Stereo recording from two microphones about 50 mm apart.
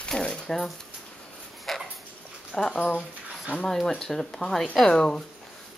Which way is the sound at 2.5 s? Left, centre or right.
Centre.